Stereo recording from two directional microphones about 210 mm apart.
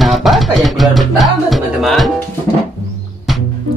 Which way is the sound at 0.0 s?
Centre (ahead or behind).